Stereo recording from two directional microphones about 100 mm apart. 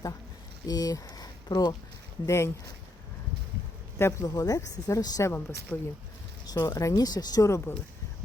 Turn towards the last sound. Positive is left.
turn(degrees=25)  # may be behind; listen again after turning